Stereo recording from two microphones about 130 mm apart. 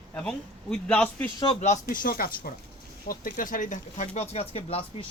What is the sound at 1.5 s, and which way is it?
Speech, 65° left (ahead or behind).